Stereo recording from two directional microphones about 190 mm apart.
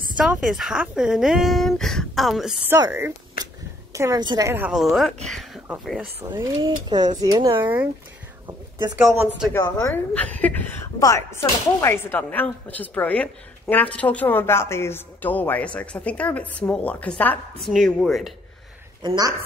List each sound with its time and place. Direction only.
0.2 s speech: centre (ahead or behind)
2.7 s a woman's voice: 15° right (ahead or behind)
5.3 s a sound: centre (ahead or behind)
6.3 s a woman's voice: 20° right (ahead or behind)
8.5 s a sound: 25° right (ahead or behind)
8.9 s a woman's voice: 10° right (ahead or behind)
9.5 s a woman's voice: 15° left (ahead or behind)
19.0 s speech: 20° right (ahead or behind)